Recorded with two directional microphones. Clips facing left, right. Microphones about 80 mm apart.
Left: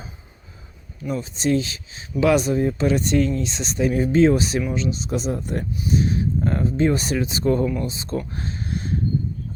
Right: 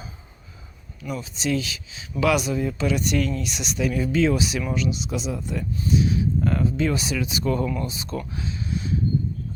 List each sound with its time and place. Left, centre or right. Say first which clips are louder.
1.0 s speech: left 4 dB; left
6.4 s speech: left 6 dB; left
7.6 s speech: left 3 dB; centre
7.9 s speech: left 4 dB; left
8.3 s a sound: even; left